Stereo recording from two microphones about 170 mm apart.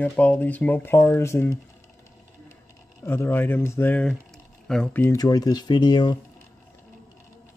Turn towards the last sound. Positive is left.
turn(degrees=25)  # may be behind; listen again after turning